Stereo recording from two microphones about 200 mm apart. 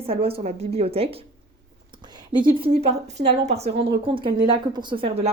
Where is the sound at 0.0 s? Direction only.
30° right (ahead or behind).